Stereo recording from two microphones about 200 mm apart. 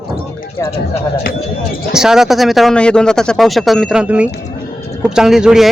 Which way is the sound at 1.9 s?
Centre (ahead or behind).